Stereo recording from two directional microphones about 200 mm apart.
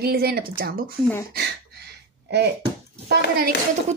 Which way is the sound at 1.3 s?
55° right (ahead or behind).